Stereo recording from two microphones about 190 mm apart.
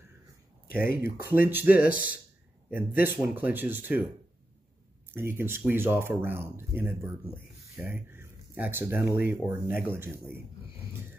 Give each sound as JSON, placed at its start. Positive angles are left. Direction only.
{"t": 0.7, "sound": "speech", "side_deg": 50}
{"t": 1.2, "sound": "speech", "side_deg": -10}
{"t": 5.1, "sound": "speech", "side_deg": -10}